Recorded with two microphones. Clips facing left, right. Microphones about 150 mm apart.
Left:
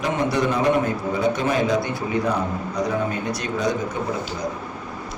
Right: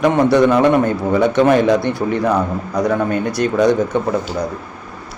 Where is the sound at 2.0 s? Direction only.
55° right (ahead or behind).